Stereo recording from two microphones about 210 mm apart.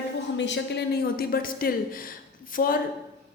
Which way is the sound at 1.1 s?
45° left (ahead or behind).